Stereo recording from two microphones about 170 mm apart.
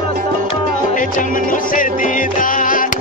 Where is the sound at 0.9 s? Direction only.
50° left (ahead or behind).